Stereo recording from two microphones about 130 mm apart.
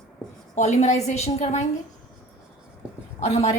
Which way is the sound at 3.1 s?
50° left (ahead or behind).